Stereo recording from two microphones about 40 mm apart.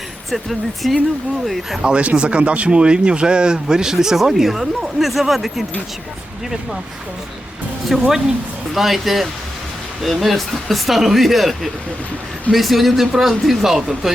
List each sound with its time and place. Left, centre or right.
0.3 s speech: centre
1.8 s speech: right; by 5.6 s centre
7.9 s speech: centre